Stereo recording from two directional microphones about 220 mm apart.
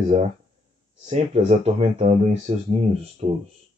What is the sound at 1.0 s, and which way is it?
Speech, 30° right (ahead or behind).